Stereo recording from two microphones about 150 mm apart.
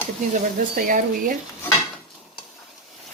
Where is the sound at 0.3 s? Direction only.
65° right (ahead or behind).